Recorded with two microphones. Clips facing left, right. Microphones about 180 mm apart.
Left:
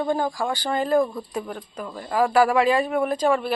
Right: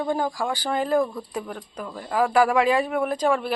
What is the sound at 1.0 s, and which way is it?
A woman's voice, 10° left (ahead or behind).